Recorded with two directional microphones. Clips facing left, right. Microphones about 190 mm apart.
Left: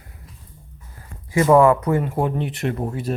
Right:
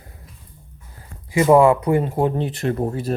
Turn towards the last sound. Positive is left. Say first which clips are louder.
# right 2 dB
turn(degrees=-35)  # may be behind; listen again after turning